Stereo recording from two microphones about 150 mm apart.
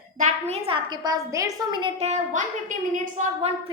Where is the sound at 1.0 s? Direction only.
25° right (ahead or behind).